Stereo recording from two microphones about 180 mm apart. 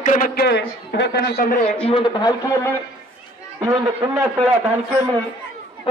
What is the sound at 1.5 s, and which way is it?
Speech, 40° left (ahead or behind).